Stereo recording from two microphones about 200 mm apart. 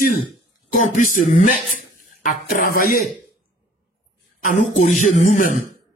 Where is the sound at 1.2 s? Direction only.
40° left (ahead or behind).